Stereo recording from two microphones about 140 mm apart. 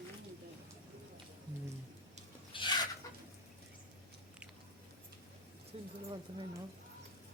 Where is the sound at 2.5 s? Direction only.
35° left (ahead or behind).